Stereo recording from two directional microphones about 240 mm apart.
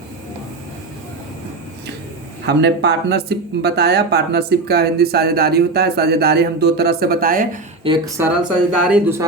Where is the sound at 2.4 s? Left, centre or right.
Right.